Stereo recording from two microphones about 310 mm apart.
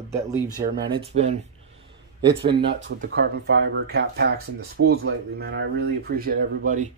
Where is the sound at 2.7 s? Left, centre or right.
Right.